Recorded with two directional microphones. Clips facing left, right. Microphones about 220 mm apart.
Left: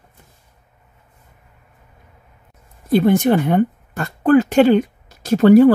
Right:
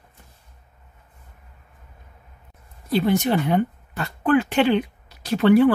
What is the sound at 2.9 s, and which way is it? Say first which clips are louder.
Speech: left 6 dB; 50° left (ahead or behind).